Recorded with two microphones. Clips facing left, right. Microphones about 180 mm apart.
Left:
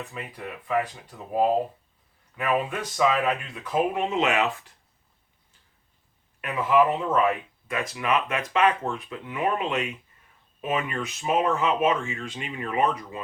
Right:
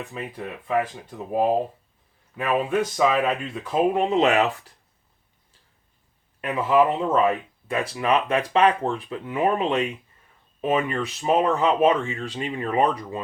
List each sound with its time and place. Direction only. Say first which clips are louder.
0.1 s speech: right 4 dB; 25° right (ahead or behind)
2.9 s speech: left 2 dB; 25° right (ahead or behind)
6.4 s speech: right 2 dB; 30° right (ahead or behind)